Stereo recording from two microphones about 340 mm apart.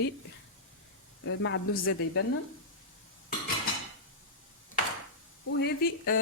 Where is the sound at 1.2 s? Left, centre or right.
Left.